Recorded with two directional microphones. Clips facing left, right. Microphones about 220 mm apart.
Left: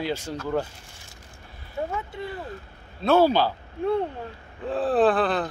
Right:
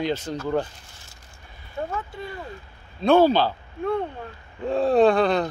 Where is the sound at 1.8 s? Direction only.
15° left (ahead or behind).